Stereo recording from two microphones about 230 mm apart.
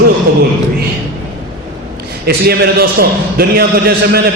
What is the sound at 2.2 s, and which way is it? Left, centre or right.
A man's voice, right.